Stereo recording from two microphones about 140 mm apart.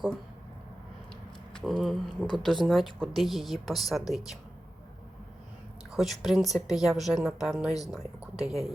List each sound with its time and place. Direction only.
1.5 s speech: centre (ahead or behind)
5.9 s speech: centre (ahead or behind)